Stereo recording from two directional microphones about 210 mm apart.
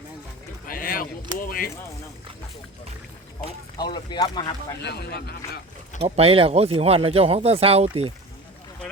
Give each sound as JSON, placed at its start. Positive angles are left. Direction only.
{"t": 0.7, "sound": "a sound", "side_deg": 45}
{"t": 3.8, "sound": "speech", "side_deg": 20}
{"t": 4.8, "sound": "speech", "side_deg": 50}
{"t": 6.0, "sound": "speech", "side_deg": -30}